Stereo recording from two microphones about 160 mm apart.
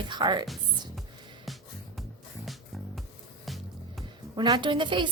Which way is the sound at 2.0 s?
Centre (ahead or behind).